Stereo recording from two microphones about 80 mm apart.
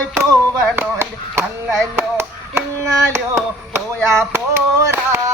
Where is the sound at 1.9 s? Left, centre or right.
Right.